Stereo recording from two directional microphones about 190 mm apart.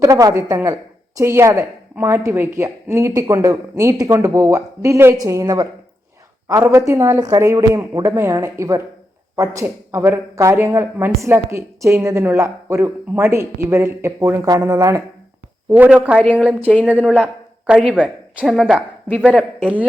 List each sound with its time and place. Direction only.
0.0 s a woman's voice: 20° right (ahead or behind); by 18.8 s centre (ahead or behind)